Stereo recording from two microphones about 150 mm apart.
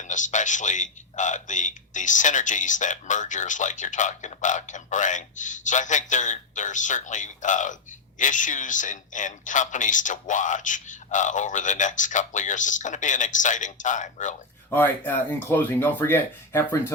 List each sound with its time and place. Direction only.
0.0 s speech: 55° left (ahead or behind)
14.7 s speech: 15° left (ahead or behind)